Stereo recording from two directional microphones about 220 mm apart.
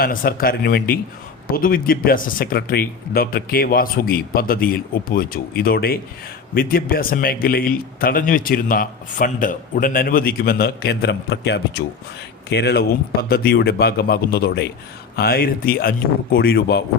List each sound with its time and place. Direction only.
0.0 s speech: 40° left (ahead or behind)